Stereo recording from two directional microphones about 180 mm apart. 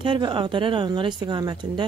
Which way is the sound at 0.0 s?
25° right (ahead or behind).